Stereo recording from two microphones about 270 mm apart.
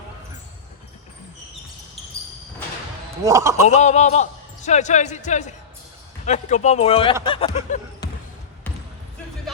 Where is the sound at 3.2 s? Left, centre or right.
Centre.